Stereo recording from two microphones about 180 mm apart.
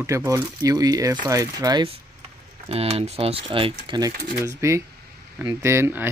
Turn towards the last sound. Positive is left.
turn(degrees=-15)  # may be behind; listen again after turning